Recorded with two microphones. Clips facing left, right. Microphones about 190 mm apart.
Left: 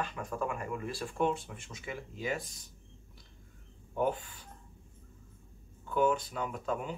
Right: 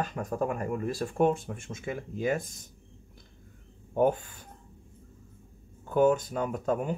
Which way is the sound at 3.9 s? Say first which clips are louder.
Right 7 dB; 45° right (ahead or behind).